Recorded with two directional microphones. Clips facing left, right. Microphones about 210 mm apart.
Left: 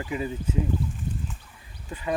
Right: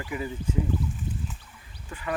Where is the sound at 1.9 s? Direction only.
20° left (ahead or behind).